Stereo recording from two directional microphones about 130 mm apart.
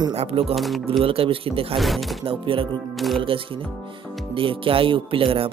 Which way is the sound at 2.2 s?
45° right (ahead or behind).